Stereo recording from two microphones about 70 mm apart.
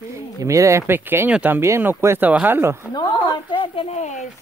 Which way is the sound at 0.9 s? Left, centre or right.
Right.